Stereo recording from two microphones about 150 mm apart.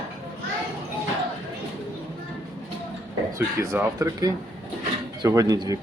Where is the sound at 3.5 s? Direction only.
15° right (ahead or behind).